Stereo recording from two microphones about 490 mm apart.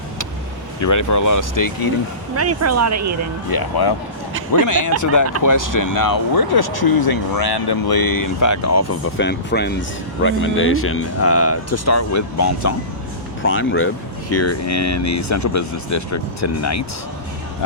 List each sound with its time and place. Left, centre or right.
0.8 s speech: left
2.3 s speech: right
3.5 s speech: left